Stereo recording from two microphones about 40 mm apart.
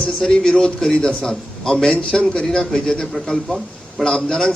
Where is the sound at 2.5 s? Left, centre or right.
Centre.